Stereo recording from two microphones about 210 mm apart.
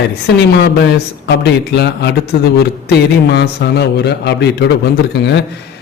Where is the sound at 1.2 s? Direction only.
50° left (ahead or behind).